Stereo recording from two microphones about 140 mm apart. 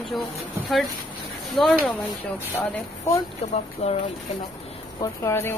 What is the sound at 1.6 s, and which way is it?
Speech, 5° left (ahead or behind).